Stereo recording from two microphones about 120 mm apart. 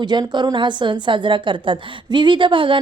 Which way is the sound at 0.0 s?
40° right (ahead or behind).